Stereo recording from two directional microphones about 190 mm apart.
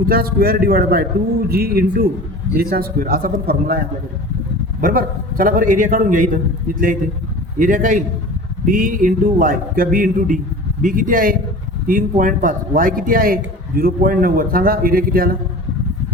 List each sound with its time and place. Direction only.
0.0 s a man's voice: 50° right (ahead or behind)
4.8 s a man's voice: 50° right (ahead or behind)